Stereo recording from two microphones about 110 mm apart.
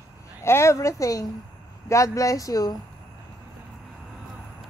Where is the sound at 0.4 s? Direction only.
25° left (ahead or behind).